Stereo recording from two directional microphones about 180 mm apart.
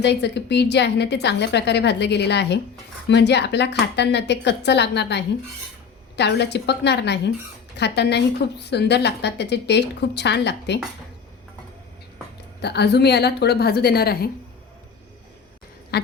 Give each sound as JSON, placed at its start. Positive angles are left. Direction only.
{"t": 0.0, "sound": "a woman's voice", "side_deg": 70}
{"t": 12.6, "sound": "a woman's voice", "side_deg": 65}